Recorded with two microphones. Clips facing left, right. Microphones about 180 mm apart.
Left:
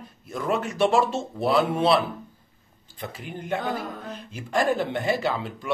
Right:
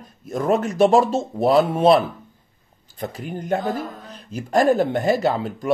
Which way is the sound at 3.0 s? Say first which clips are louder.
Right 6 dB; 40° right (ahead or behind).